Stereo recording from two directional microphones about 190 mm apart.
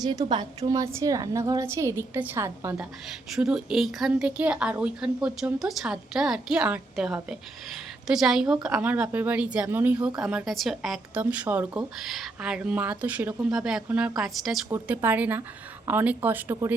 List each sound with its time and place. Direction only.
0.0 s a woman's voice: 20° right (ahead or behind)